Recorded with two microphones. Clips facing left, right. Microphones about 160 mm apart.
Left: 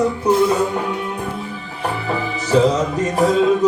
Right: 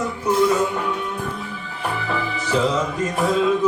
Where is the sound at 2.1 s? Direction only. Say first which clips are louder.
Left 5 dB; 40° left (ahead or behind).